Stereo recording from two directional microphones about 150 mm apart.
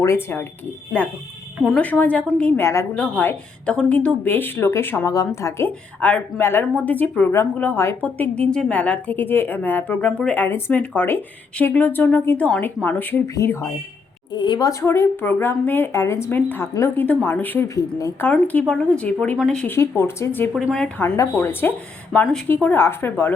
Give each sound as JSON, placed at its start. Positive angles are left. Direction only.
{"t": 0.0, "sound": "speech", "side_deg": 15}
{"t": 1.6, "sound": "speech", "side_deg": 5}
{"t": 14.3, "sound": "a woman's voice", "side_deg": 30}
{"t": 14.7, "sound": "speech", "side_deg": 20}
{"t": 20.0, "sound": "speech", "side_deg": 15}
{"t": 20.5, "sound": "speech", "side_deg": 0}
{"t": 21.0, "sound": "speech", "side_deg": 15}